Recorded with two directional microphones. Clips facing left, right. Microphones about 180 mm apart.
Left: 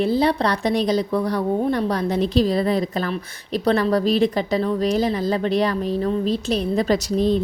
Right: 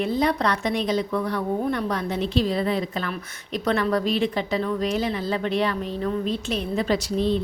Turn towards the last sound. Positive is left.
turn(degrees=40)  # may be behind; listen again after turning